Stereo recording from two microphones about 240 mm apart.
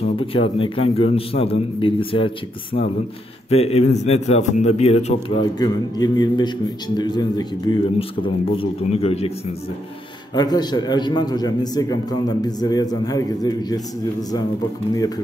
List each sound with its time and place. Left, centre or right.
0.2 s a man's voice: left
5.6 s a man's voice: centre
10.3 s a man's voice: centre